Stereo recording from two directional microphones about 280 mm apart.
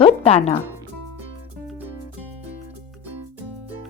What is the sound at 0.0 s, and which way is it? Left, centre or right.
Speech, left.